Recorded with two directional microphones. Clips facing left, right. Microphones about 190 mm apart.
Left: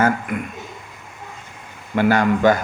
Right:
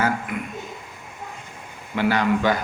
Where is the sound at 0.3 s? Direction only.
50° left (ahead or behind).